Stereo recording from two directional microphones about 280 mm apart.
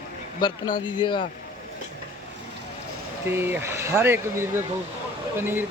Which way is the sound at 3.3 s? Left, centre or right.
Centre.